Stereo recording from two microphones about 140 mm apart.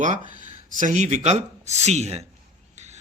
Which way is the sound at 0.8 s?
60° right (ahead or behind).